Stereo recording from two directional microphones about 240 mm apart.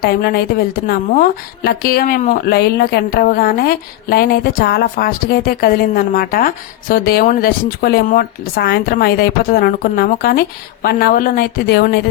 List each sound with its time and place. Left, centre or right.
0.0 s speech: left